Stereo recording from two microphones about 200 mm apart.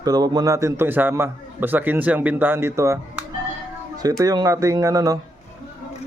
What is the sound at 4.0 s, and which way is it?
A man's voice, 15° right (ahead or behind).